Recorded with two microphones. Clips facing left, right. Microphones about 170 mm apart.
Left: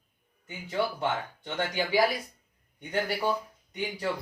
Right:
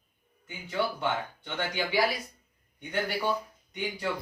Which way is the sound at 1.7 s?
40° left (ahead or behind).